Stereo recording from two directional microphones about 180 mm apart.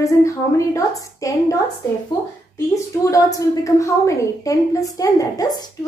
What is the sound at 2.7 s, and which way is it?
A woman's voice, 20° left (ahead or behind).